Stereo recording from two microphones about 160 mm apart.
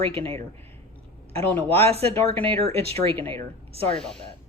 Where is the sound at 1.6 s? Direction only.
40° right (ahead or behind).